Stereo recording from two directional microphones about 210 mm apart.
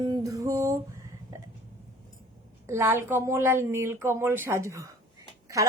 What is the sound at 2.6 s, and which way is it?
A woman's voice, 10° right (ahead or behind).